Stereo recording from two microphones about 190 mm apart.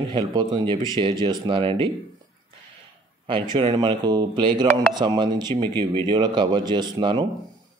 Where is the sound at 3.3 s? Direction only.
25° right (ahead or behind).